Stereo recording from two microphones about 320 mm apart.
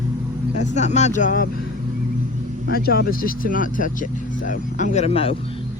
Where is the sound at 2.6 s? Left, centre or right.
Left.